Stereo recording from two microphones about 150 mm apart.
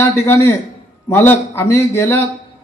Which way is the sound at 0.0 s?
15° left (ahead or behind).